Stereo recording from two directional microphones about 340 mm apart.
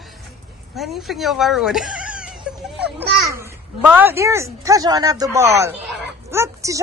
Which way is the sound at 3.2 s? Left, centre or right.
Centre.